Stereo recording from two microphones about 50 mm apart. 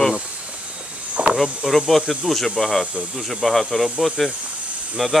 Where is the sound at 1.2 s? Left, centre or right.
Right.